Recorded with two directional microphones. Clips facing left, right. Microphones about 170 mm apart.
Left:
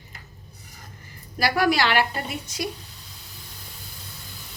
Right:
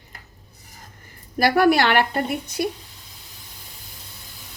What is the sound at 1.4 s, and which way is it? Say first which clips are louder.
Speech: right 5 dB; 55° right (ahead or behind).